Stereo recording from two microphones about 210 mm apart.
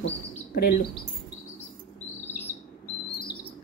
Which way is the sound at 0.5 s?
45° left (ahead or behind).